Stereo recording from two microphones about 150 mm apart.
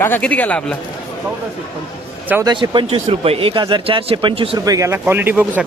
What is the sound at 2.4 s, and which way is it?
Speech, 30° right (ahead or behind).